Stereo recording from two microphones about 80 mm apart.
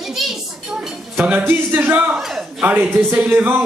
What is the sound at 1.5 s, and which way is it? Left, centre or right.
Speech, right.